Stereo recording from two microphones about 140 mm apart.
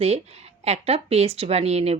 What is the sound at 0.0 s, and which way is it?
Speech, 45° right (ahead or behind).